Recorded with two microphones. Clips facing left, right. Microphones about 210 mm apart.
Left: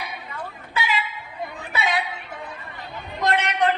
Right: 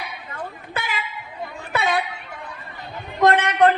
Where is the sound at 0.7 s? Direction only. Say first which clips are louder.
Left 5 dB; 50° right (ahead or behind).